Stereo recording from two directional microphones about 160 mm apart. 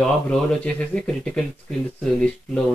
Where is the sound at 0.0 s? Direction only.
5° left (ahead or behind).